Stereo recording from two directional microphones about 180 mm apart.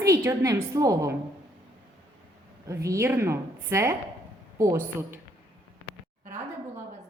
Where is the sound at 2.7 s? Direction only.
15° right (ahead or behind).